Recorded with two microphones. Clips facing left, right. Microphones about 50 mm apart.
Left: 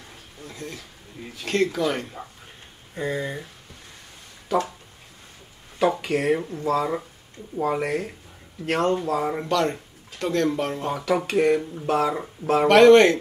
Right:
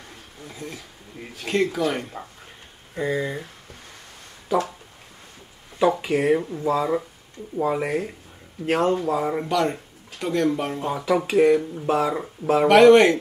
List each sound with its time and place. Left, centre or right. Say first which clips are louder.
0.5 s a sound: even; centre
1.4 s speech: even; centre
5.8 s speech: right 2 dB; centre
8.9 s speech: right 1 dB; right
9.2 s speech: right 1 dB; centre